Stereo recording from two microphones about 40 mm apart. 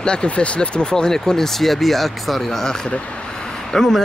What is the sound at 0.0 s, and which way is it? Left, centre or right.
Speech, left.